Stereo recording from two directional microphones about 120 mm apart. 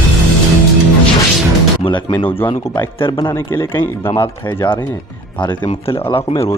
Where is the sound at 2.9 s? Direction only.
45° left (ahead or behind).